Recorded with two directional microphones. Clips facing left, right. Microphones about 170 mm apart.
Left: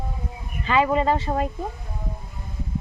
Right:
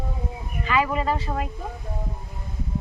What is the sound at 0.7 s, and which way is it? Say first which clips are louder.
Speech: left 4 dB; 25° left (ahead or behind).